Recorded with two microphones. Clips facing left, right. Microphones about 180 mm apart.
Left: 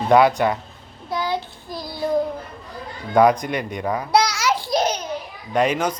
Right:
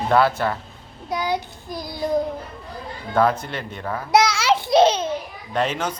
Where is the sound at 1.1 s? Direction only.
15° right (ahead or behind).